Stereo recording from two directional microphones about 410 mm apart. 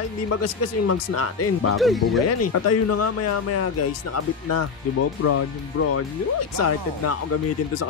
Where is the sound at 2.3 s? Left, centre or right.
Left.